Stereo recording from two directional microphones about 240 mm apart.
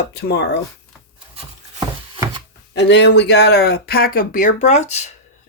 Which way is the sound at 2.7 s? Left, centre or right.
Left.